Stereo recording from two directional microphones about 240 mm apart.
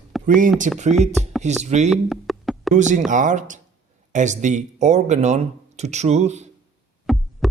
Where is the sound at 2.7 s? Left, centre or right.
Right.